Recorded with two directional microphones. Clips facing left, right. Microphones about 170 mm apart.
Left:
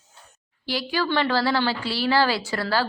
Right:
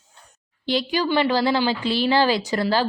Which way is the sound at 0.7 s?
20° right (ahead or behind).